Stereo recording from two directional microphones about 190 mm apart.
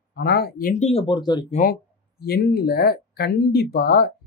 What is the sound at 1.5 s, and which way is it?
Speech, 50° left (ahead or behind).